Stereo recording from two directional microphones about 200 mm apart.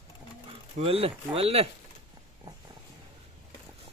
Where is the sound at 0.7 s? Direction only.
30° right (ahead or behind).